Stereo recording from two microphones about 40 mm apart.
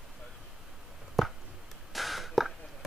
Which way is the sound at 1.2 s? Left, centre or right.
Centre.